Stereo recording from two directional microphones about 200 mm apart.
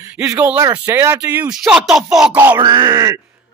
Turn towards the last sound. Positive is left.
turn(degrees=-15)  # may be behind; listen again after turning